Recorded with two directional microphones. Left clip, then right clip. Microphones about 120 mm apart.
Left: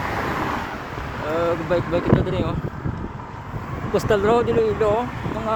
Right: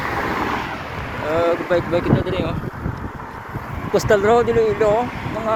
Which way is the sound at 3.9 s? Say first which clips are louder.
Right 3 dB; 10° left (ahead or behind).